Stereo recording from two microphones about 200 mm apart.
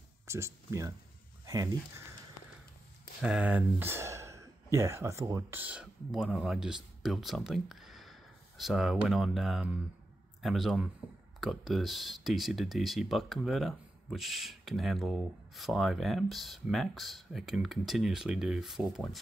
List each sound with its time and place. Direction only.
0.3 s speech: 15° right (ahead or behind)
3.2 s speech: 5° right (ahead or behind)